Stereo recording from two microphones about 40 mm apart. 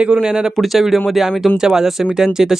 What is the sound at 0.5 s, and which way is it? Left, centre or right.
Speech, centre.